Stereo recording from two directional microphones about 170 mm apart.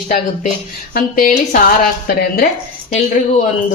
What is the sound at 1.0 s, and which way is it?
Speech, 55° left (ahead or behind).